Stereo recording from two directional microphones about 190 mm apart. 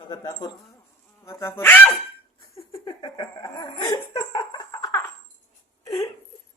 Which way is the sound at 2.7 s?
20° left (ahead or behind).